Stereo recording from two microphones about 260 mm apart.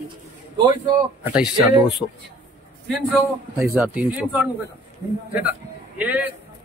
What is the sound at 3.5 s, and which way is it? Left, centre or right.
Speech, centre.